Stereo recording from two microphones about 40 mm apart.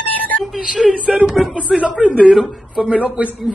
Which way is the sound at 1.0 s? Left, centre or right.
Right.